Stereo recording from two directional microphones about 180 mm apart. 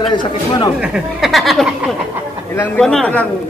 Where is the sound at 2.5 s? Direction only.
10° left (ahead or behind).